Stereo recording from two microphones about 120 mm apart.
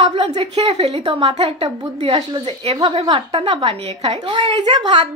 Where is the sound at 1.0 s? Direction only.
45° right (ahead or behind).